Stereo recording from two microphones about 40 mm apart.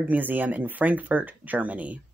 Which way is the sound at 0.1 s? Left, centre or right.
Right.